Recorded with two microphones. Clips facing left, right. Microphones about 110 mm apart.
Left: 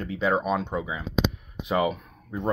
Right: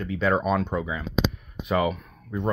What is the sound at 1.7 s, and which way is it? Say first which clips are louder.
Speech: right 1 dB; 25° left (ahead or behind).